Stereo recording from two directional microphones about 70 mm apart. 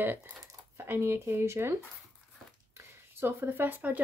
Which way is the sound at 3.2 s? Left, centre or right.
Right.